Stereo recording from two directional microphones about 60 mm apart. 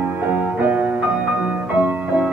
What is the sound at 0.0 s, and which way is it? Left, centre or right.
Music, right.